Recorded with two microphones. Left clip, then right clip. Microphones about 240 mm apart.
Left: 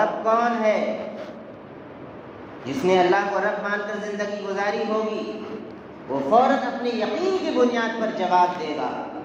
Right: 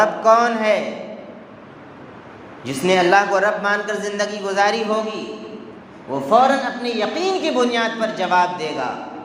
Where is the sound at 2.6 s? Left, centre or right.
Right.